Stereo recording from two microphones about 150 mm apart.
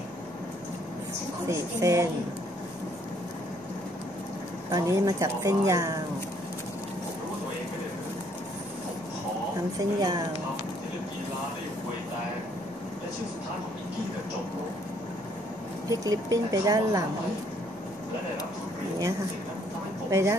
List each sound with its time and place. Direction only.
1.5 s a woman's voice: 20° right (ahead or behind)
4.6 s a woman's voice: 20° right (ahead or behind)
9.8 s a woman's voice: 25° right (ahead or behind)
15.9 s a woman's voice: 25° right (ahead or behind)
20.1 s speech: 20° right (ahead or behind)